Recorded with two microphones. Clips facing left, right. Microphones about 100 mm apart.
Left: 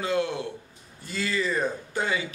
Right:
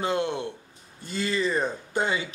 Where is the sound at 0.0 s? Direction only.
25° right (ahead or behind).